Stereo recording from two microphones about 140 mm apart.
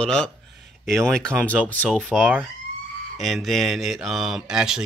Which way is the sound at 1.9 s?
5° right (ahead or behind).